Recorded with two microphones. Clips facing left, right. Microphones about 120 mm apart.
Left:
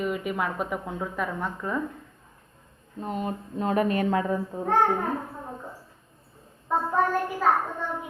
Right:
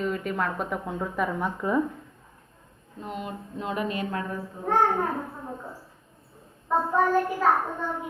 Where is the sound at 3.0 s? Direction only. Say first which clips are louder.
Left 4 dB; 35° left (ahead or behind).